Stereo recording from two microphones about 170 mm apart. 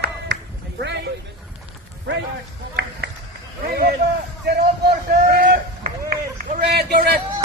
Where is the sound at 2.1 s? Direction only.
90° right.